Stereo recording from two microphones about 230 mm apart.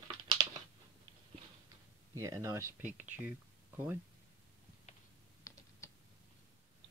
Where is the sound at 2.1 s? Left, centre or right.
Centre.